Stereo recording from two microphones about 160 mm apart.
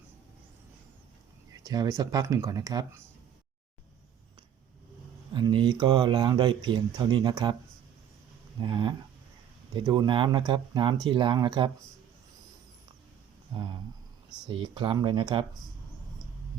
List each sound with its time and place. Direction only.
1.5 s speech: 20° right (ahead or behind)
5.3 s speech: 30° right (ahead or behind)
8.6 s speech: 30° right (ahead or behind)
14.4 s speech: 30° right (ahead or behind)